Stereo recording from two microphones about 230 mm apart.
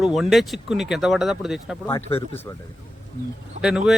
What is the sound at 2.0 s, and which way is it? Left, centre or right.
Speech, left.